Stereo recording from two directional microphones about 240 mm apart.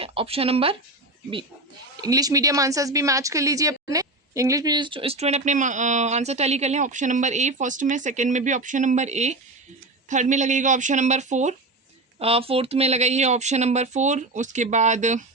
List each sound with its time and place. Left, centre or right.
0.0 s speech: right
2.0 s a woman's voice: centre